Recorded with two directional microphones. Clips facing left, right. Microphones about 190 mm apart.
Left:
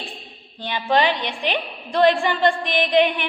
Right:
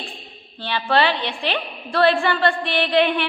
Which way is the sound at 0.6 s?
15° left (ahead or behind).